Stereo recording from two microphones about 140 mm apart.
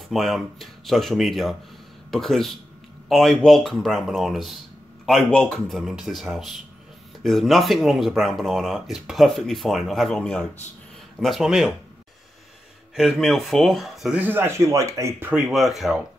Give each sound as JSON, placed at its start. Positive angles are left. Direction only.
{"t": 0.1, "sound": "speech", "side_deg": 0}
{"t": 12.9, "sound": "speech", "side_deg": 0}
{"t": 14.2, "sound": "speech", "side_deg": -15}
{"t": 15.4, "sound": "speech", "side_deg": 0}